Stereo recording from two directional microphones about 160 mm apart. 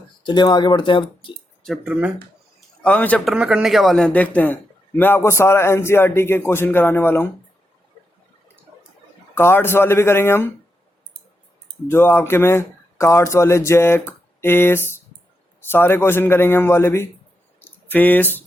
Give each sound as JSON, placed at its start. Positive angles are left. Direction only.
{"t": 0.3, "sound": "speech", "side_deg": 25}
{"t": 1.6, "sound": "speech", "side_deg": 0}
{"t": 2.8, "sound": "speech", "side_deg": 10}
{"t": 3.3, "sound": "speech", "side_deg": -5}
{"t": 9.3, "sound": "speech", "side_deg": 15}
{"t": 11.9, "sound": "speech", "side_deg": 15}
{"t": 17.6, "sound": "a sound", "side_deg": 10}